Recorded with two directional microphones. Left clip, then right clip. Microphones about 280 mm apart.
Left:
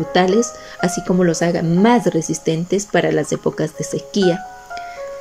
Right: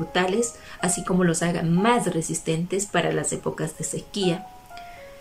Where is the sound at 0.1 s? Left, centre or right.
Left.